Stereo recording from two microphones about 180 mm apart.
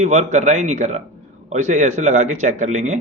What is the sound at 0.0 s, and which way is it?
Speech, 40° right (ahead or behind).